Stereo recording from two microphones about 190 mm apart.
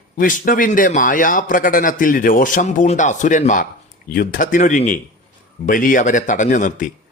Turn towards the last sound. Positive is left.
turn(degrees=45)  # may be behind; listen again after turning